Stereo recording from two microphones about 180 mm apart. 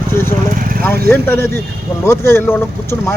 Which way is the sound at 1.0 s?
10° left (ahead or behind).